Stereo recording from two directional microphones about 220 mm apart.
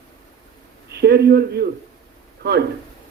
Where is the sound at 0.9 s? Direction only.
50° right (ahead or behind).